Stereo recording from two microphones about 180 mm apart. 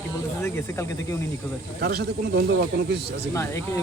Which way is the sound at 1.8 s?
65° right (ahead or behind).